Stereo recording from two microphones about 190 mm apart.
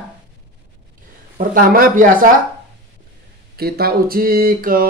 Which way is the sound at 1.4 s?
50° right (ahead or behind).